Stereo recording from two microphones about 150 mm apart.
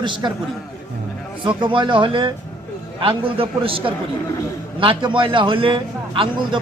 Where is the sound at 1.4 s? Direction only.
35° right (ahead or behind).